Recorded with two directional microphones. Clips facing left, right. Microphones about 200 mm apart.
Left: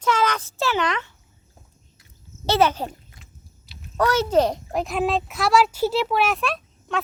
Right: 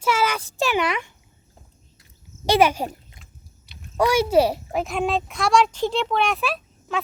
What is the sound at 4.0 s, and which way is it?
A child's voice, 10° right (ahead or behind).